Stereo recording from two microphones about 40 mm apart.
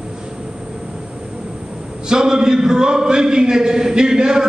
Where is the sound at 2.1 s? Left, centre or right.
Centre.